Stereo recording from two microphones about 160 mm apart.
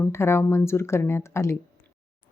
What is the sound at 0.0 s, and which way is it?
Speech, 15° left (ahead or behind).